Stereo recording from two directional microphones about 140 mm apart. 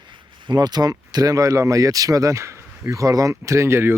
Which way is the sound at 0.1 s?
35° right (ahead or behind).